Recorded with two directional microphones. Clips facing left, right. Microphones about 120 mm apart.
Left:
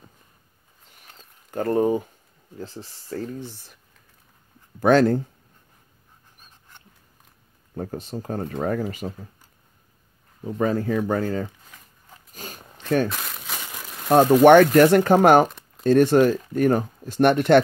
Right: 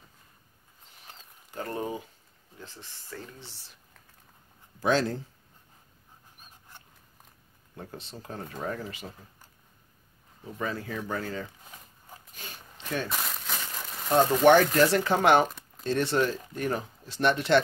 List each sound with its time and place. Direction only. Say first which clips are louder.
1.5 s speech: left 12 dB; 45° left (ahead or behind)
4.7 s speech: left 9 dB; 55° left (ahead or behind)
7.7 s speech: left 11 dB; 45° left (ahead or behind)
10.4 s speech: left 11 dB; 45° left (ahead or behind)
12.4 s zipper: left 8 dB; 45° left (ahead or behind)
13.1 s crumpling: even; centre (ahead or behind)
14.4 s speech: left 7 dB; 55° left (ahead or behind)